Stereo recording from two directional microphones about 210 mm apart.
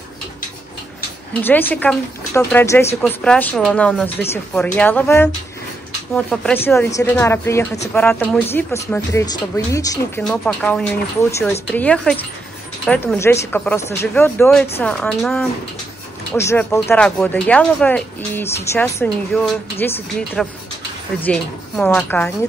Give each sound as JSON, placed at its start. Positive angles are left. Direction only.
{"t": 1.4, "sound": "speech", "side_deg": 10}
{"t": 10.2, "sound": "speech", "side_deg": 5}